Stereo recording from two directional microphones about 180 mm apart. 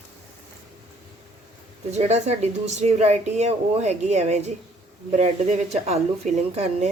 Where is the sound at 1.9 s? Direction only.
40° right (ahead or behind).